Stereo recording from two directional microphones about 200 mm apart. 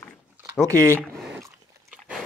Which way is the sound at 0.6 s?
10° left (ahead or behind).